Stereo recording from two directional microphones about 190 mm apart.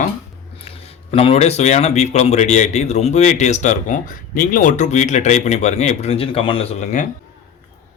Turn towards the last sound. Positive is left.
turn(degrees=40)  # may be behind; listen again after turning